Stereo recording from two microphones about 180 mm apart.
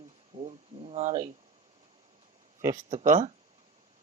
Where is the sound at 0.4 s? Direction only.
35° right (ahead or behind).